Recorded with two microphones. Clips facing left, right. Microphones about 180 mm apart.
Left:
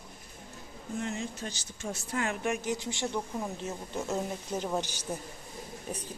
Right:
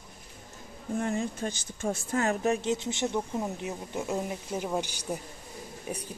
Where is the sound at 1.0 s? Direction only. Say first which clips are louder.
Right 6 dB; 55° right (ahead or behind).